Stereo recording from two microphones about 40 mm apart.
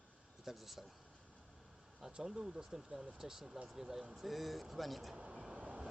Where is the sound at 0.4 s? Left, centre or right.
Centre.